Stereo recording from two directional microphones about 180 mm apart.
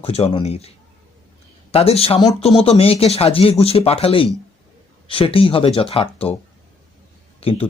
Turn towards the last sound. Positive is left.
turn(degrees=30)  # may be behind; listen again after turning